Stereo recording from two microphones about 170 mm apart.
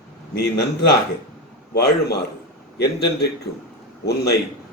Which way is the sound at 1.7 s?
70° left (ahead or behind).